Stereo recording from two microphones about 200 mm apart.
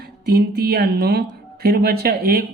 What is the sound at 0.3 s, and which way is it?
Speech, 50° right (ahead or behind).